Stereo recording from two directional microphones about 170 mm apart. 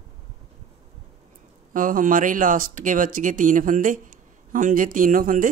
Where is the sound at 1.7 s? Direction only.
50° right (ahead or behind).